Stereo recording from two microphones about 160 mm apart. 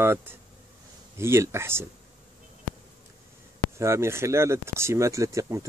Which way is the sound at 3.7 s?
15° right (ahead or behind).